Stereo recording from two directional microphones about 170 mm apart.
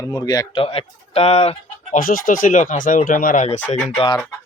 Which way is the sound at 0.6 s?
35° left (ahead or behind).